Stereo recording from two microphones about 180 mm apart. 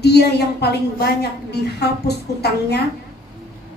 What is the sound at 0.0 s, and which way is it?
A woman's voice, 65° left (ahead or behind).